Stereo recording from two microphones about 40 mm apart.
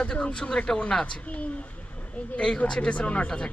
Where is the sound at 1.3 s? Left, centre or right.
Left.